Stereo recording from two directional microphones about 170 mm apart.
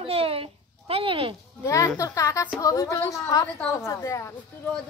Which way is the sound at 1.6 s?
20° left (ahead or behind).